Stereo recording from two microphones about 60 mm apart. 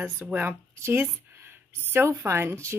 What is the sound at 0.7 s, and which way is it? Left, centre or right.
Speech, right.